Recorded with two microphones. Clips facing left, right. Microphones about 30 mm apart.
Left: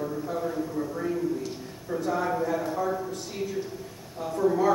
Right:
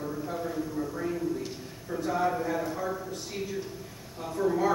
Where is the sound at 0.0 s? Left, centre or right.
Centre.